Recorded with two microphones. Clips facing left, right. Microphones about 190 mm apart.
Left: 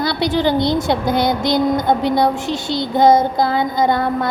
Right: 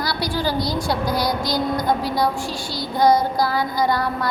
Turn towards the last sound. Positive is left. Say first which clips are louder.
# left 4 dB
turn(degrees=25)  # may be behind; listen again after turning